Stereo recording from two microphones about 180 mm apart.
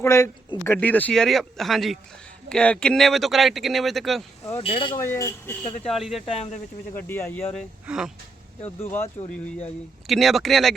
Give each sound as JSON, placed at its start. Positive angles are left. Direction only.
{"t": 0.0, "sound": "speech", "side_deg": 15}
{"t": 4.5, "sound": "speech", "side_deg": 30}
{"t": 5.0, "sound": "speech", "side_deg": 15}
{"t": 5.8, "sound": "speech", "side_deg": 0}
{"t": 6.9, "sound": "speech", "side_deg": 10}
{"t": 7.9, "sound": "speech", "side_deg": -5}
{"t": 8.8, "sound": "speech", "side_deg": 15}
{"t": 10.1, "sound": "speech", "side_deg": 0}